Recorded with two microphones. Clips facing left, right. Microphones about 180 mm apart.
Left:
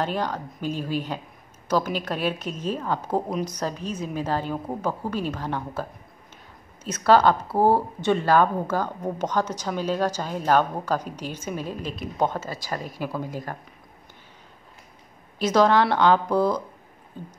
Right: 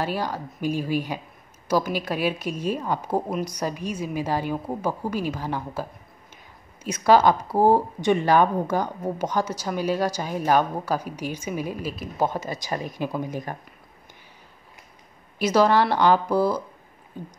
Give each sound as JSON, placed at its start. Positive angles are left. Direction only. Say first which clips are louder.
{"t": 0.0, "sound": "speech", "louder": "even", "side_deg": -10}
{"t": 12.4, "sound": "speech", "louder": "right 2 dB", "side_deg": -20}
{"t": 15.3, "sound": "speech", "louder": "even", "side_deg": -10}